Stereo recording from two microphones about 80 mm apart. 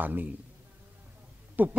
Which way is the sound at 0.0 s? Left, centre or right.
Right.